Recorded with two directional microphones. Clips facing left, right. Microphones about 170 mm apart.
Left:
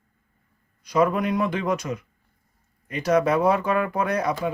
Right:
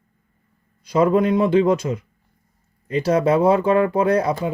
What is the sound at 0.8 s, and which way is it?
Speech, 30° right (ahead or behind).